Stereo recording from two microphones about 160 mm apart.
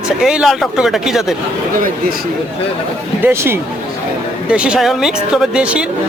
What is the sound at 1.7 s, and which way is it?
Speech, 60° right (ahead or behind).